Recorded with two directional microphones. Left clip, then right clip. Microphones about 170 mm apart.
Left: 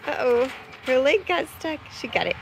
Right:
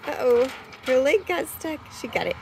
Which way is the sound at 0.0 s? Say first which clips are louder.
Right 1 dB; 10° right (ahead or behind).